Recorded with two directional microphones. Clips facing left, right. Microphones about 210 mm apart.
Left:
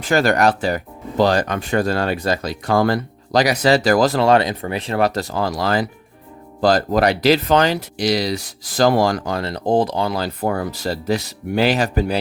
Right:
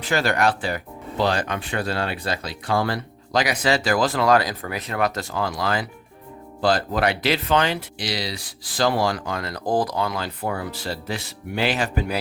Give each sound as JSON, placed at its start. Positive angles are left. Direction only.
{"t": 0.0, "sound": "speech", "side_deg": 45}
{"t": 4.3, "sound": "speech", "side_deg": 25}